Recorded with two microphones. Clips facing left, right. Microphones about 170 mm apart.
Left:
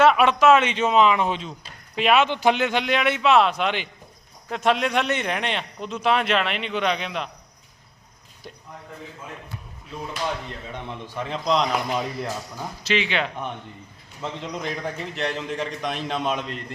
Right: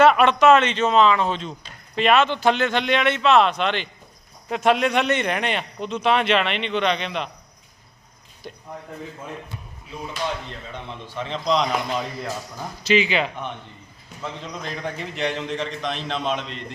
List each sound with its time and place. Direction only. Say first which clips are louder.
0.0 s a man's voice: right 2 dB; 5° left (ahead or behind)
4.4 s a man's voice: right 3 dB; centre (ahead or behind)
8.4 s speech: right 3 dB; centre (ahead or behind)
10.7 s a man's voice: left 1 dB; 15° left (ahead or behind)
12.8 s a man's voice: right 4 dB; 5° right (ahead or behind)
14.2 s a man's voice: left 2 dB; 15° left (ahead or behind)
14.9 s a man's voice: right 1 dB; centre (ahead or behind)